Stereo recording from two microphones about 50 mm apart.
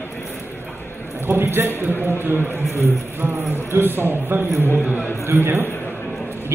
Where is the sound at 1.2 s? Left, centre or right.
Right.